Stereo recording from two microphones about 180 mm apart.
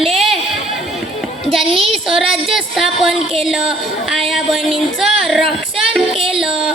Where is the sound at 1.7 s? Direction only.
30° right (ahead or behind).